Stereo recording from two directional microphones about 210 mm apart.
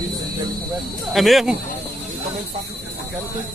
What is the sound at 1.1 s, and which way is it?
Speech, centre (ahead or behind).